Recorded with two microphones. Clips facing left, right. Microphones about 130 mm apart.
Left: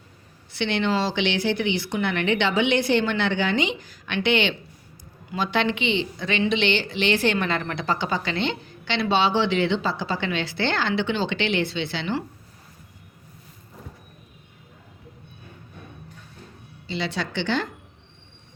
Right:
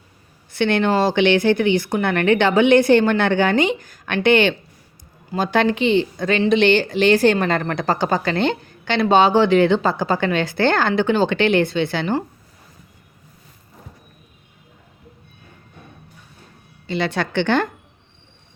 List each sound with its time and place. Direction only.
0.5 s a woman's voice: 50° right (ahead or behind)
16.8 s speech: 55° right (ahead or behind)